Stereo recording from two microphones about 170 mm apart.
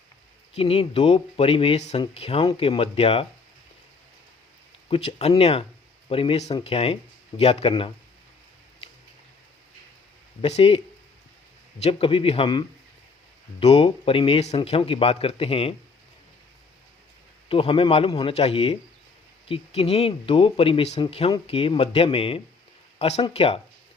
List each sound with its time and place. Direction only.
0.5 s speech: 35° left (ahead or behind)
4.9 s speech: 35° left (ahead or behind)
10.4 s speech: 40° left (ahead or behind)
11.8 s speech: 35° left (ahead or behind)
17.5 s speech: 35° left (ahead or behind)